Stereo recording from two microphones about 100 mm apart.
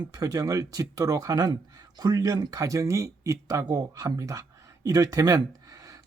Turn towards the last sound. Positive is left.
turn(degrees=-35)  # may be behind; listen again after turning